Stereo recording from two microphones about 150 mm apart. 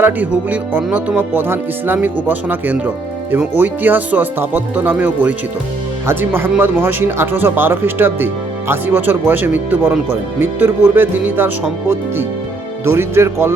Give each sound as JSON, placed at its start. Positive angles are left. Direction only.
{"t": 0.0, "sound": "speech", "side_deg": -10}